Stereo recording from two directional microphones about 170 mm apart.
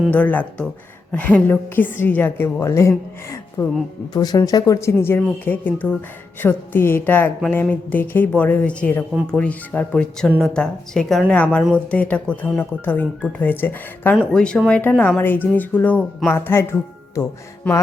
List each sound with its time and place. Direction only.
0.1 s speech: 10° left (ahead or behind)